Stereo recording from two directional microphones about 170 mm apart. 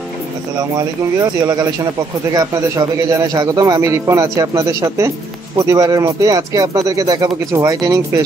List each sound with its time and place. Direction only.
0.6 s speech: 20° right (ahead or behind)